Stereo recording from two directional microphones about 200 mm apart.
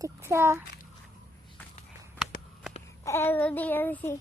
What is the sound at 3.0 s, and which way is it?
A child's voice, 10° left (ahead or behind).